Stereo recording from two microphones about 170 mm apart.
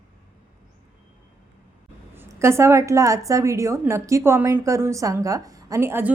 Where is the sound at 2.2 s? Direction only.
15° right (ahead or behind).